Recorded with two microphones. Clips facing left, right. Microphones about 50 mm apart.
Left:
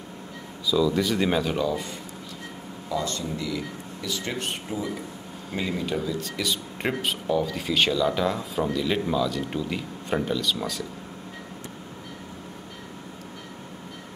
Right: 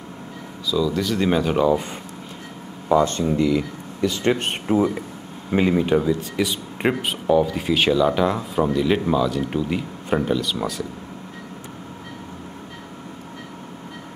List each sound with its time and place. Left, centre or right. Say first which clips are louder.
0.7 s speech: right 1 dB; centre
1.3 s speech: right 4 dB; centre
1.6 s speech: right 8 dB; right
2.9 s speech: right 11 dB; right; by 10.9 s centre